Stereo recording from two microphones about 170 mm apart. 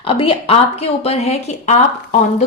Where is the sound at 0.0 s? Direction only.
35° left (ahead or behind).